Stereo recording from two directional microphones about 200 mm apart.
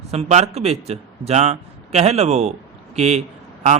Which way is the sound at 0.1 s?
35° right (ahead or behind).